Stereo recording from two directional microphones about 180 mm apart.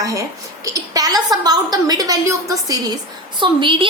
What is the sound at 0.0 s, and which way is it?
A woman's voice, 20° right (ahead or behind).